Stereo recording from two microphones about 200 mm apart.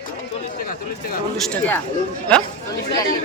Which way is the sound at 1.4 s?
5° left (ahead or behind).